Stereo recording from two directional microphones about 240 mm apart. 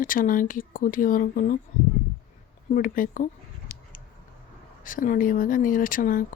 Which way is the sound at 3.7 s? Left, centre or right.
Left.